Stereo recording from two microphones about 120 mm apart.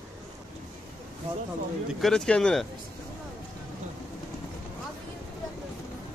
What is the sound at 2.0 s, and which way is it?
Speech, 5° left (ahead or behind).